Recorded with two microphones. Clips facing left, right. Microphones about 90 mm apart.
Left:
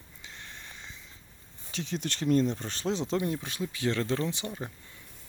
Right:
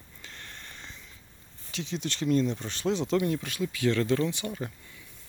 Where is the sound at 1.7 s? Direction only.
45° left (ahead or behind); by 4.7 s 25° left (ahead or behind).